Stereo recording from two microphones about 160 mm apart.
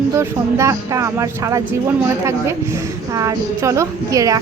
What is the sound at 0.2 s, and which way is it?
A woman's voice, 20° right (ahead or behind).